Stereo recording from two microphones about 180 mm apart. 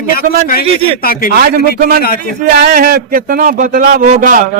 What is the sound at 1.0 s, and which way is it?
Speech, 50° left (ahead or behind).